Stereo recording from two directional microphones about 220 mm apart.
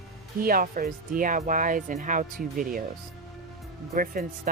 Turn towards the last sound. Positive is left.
turn(degrees=-40)  # may be behind; listen again after turning